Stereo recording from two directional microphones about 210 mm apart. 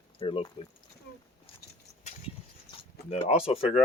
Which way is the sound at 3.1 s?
30° left (ahead or behind).